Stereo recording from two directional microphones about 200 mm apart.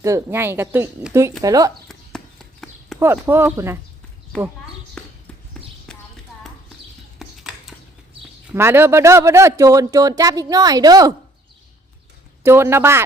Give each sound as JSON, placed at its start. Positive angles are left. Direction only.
{"t": 0.0, "sound": "speech", "side_deg": -15}
{"t": 1.9, "sound": "horse", "side_deg": 0}
{"t": 3.0, "sound": "speech", "side_deg": -10}
{"t": 5.0, "sound": "horse", "side_deg": 5}
{"t": 5.9, "sound": "clip-clop", "side_deg": 5}
{"t": 7.2, "sound": "a sound", "side_deg": 0}
{"t": 8.5, "sound": "speech", "side_deg": -10}
{"t": 12.4, "sound": "speech", "side_deg": -10}